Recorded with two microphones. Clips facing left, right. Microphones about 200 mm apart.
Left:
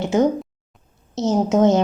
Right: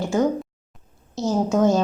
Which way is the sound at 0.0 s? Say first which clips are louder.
Left 3 dB; 20° left (ahead or behind).